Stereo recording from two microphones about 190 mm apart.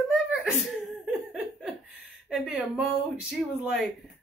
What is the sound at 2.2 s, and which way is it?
Speech, 5° right (ahead or behind).